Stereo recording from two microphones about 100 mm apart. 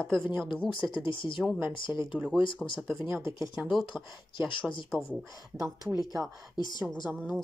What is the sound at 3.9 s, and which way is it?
Speech, 50° left (ahead or behind).